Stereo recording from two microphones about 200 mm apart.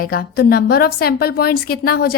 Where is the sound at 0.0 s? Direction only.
50° left (ahead or behind).